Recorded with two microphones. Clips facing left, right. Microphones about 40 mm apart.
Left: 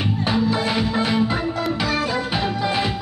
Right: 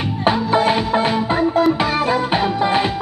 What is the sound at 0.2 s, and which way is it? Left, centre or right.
Music, right.